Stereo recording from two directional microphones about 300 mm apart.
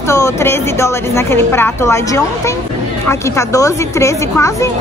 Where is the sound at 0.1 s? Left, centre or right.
Centre.